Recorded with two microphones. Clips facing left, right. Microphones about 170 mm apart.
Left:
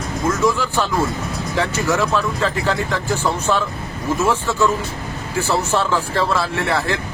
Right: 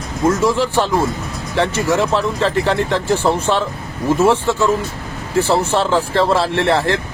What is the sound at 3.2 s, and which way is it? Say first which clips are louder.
Speech: right 5 dB; 25° right (ahead or behind).